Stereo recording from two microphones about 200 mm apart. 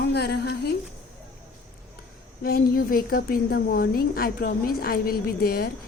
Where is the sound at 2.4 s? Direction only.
50° left (ahead or behind).